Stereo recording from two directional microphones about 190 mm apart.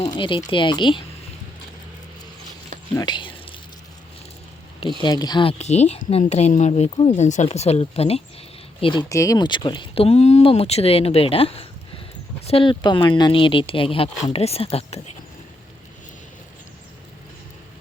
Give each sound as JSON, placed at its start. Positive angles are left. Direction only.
{"t": 0.0, "sound": "speech", "side_deg": 25}
{"t": 2.9, "sound": "speech", "side_deg": 20}
{"t": 4.8, "sound": "speech", "side_deg": 25}